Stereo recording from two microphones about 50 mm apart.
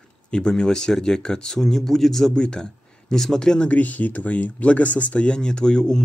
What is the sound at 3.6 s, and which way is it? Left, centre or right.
Speech, left.